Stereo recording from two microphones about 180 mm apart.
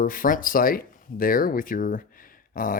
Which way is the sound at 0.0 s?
50° left (ahead or behind).